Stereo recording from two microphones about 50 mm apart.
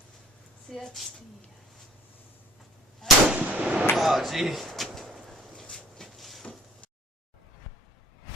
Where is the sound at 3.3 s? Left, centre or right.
Right.